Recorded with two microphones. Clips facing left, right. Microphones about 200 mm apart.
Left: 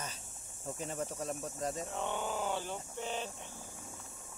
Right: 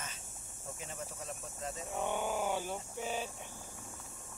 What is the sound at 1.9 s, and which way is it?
Speech, 10° right (ahead or behind).